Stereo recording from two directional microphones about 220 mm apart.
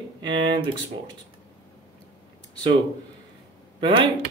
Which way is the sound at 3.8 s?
25° right (ahead or behind).